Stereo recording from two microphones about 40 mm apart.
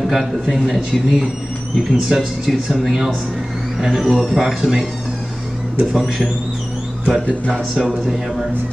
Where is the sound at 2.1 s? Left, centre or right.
Centre.